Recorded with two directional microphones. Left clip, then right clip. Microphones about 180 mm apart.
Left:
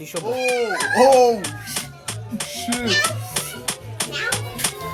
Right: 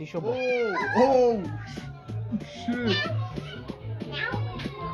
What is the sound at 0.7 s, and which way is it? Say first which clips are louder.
Speech: left 8 dB; 40° right (ahead or behind).